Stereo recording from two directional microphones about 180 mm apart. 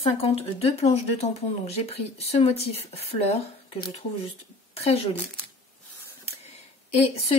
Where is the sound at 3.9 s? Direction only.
35° left (ahead or behind).